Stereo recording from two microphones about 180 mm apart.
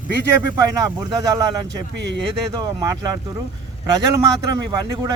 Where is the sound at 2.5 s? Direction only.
20° right (ahead or behind).